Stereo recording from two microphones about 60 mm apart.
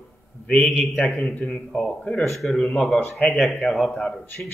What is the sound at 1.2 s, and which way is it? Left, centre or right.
A man's voice, left.